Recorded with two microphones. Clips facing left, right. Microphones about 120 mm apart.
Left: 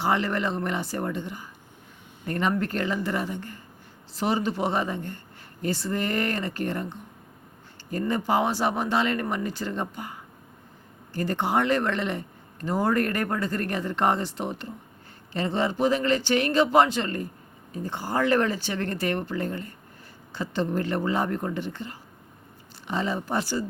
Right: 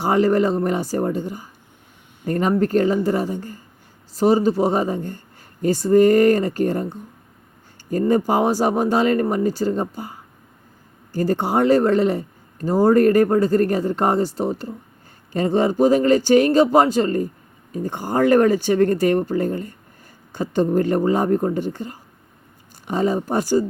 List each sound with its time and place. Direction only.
0.0 s speech: 40° right (ahead or behind)
11.2 s speech: 40° right (ahead or behind)